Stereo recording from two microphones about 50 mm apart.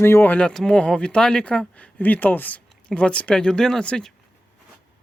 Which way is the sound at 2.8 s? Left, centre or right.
Left.